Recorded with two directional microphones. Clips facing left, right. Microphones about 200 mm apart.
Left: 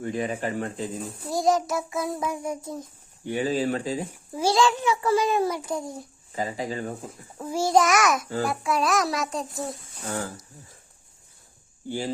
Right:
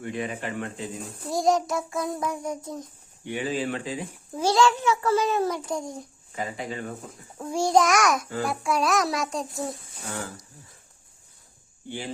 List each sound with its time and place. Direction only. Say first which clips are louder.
0.0 s speech: left 3 dB; 40° left (ahead or behind)
1.2 s a child's voice: even; centre (ahead or behind)
3.2 s speech: left 3 dB; 40° left (ahead or behind)
4.3 s a child's voice: right 1 dB; 10° left (ahead or behind)
6.3 s speech: left 3 dB; 35° left (ahead or behind)
7.3 s a child's voice: even; 5° left (ahead or behind)
11.9 s speech: left 5 dB; 40° left (ahead or behind)